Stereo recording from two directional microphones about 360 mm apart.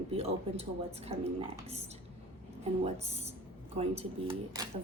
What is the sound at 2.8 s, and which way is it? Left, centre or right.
A woman's voice, centre.